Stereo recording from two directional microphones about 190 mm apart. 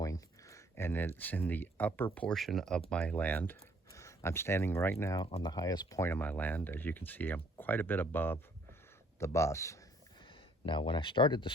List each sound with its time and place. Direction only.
0.0 s speech: 15° left (ahead or behind)
10.7 s speech: 25° left (ahead or behind)